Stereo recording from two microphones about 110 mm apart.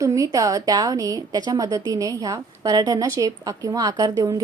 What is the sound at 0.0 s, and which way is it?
A woman's voice, 30° right (ahead or behind).